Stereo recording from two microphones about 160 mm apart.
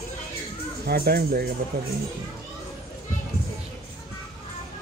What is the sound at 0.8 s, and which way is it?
Speech, 75° right (ahead or behind).